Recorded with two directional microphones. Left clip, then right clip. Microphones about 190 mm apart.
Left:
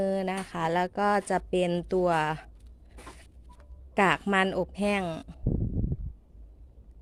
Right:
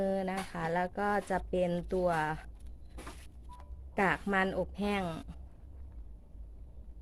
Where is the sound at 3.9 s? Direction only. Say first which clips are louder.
Left 6 dB; 45° left (ahead or behind).